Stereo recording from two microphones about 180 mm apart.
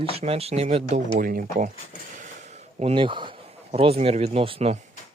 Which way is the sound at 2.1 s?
45° right (ahead or behind).